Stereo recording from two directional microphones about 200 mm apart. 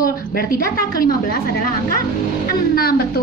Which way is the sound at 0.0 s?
45° left (ahead or behind).